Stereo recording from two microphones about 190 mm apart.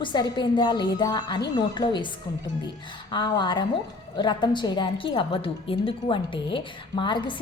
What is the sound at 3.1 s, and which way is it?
A woman's voice, 25° left (ahead or behind).